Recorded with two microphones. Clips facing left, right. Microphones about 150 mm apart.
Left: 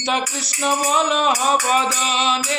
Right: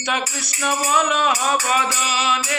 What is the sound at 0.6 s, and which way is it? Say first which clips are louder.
Speech: left 1 dB; 30° left (ahead or behind).